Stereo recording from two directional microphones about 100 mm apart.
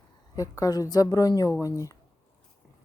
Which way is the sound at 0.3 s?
35° left (ahead or behind).